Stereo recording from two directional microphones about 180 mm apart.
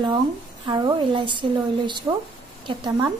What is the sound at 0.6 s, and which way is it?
A woman's voice, 25° right (ahead or behind).